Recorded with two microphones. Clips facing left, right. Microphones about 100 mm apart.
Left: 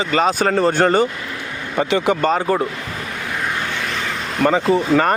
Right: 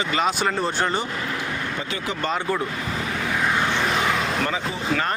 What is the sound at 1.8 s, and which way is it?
Speech, 70° left (ahead or behind).